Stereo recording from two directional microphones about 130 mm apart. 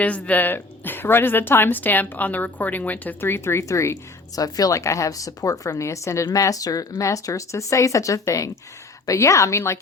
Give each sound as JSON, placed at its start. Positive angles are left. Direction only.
{"t": 0.0, "sound": "speech", "side_deg": 10}